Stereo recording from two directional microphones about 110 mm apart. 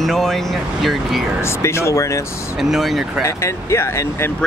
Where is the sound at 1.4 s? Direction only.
25° left (ahead or behind).